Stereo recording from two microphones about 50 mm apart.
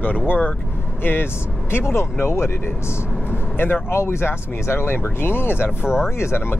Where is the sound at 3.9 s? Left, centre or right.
Left.